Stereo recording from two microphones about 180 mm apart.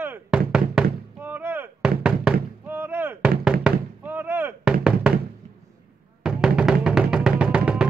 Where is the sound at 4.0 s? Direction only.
10° right (ahead or behind).